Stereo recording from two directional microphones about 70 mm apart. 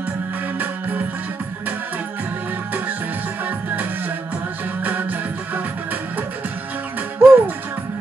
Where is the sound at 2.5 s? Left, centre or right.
Right.